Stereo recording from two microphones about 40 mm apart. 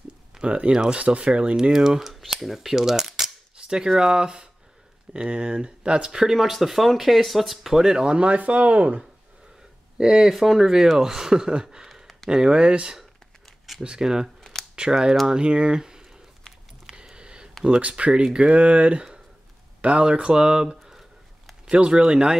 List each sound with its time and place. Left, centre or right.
0.5 s speech: right
1.6 s speech: centre
7.8 s speech: centre
8.2 s speech: right
9.9 s speech: centre
16.8 s a sound: centre
17.6 s speech: right